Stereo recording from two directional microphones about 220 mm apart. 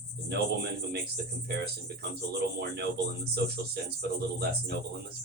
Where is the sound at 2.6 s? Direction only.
45° right (ahead or behind).